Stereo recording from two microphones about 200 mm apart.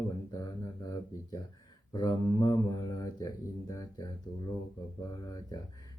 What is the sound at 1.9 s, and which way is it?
Speech, 20° left (ahead or behind).